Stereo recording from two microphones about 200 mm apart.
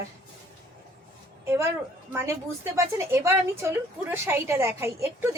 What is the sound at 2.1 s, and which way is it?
A woman's voice, 10° right (ahead or behind).